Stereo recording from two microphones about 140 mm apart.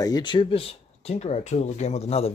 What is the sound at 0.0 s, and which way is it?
Speech, 30° left (ahead or behind).